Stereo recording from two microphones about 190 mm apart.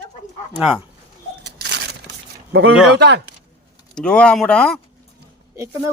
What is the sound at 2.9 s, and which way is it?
Speech, 60° right (ahead or behind).